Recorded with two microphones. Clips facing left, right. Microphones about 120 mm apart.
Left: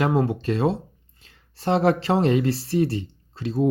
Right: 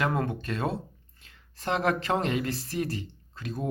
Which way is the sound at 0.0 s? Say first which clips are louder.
Left 7 dB; 30° left (ahead or behind).